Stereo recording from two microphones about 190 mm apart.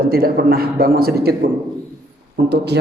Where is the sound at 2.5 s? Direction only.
60° right (ahead or behind).